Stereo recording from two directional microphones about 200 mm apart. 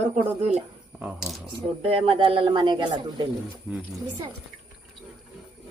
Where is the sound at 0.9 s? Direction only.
5° right (ahead or behind).